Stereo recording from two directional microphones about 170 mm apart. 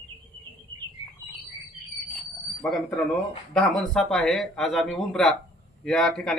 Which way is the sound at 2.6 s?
5° left (ahead or behind).